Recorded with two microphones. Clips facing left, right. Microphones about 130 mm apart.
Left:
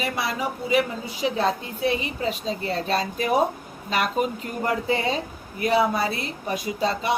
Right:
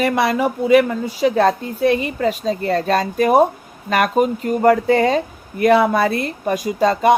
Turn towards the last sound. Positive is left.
turn(degrees=-50)  # may be behind; listen again after turning